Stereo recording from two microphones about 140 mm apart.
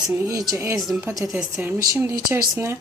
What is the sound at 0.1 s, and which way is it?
Speech, 20° right (ahead or behind).